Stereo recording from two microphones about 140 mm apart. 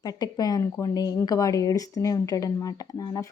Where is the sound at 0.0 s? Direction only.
30° left (ahead or behind).